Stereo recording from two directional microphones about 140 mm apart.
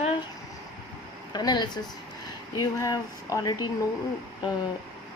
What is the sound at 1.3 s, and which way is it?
Speech, 30° left (ahead or behind).